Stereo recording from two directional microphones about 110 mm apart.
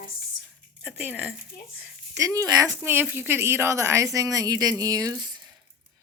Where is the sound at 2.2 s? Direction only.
30° right (ahead or behind).